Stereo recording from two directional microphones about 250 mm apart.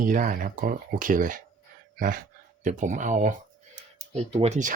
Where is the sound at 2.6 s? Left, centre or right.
Right.